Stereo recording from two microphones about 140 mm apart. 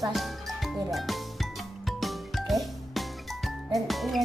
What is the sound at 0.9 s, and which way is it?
Music, centre (ahead or behind).